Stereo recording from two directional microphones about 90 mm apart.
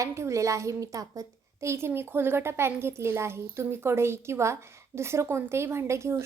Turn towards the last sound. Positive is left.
turn(degrees=-30)  # may be behind; listen again after turning